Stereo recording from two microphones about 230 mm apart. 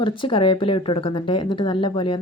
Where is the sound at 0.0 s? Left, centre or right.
Left.